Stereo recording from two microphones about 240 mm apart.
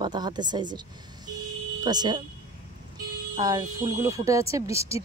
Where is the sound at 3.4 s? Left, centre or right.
Centre.